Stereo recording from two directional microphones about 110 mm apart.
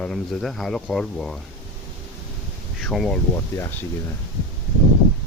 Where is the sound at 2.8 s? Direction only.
Centre (ahead or behind).